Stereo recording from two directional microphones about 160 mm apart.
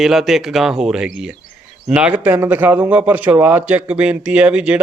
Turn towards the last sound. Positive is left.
turn(degrees=-5)  # may be behind; listen again after turning